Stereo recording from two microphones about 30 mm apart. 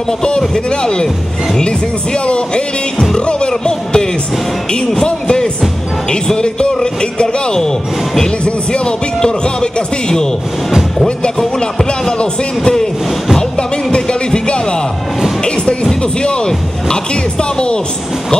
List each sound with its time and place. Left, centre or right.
0.7 s speech: left
7.5 s speech: centre
8.5 s speech: left
11.8 s speech: centre
13.9 s music: left
16.0 s speech: left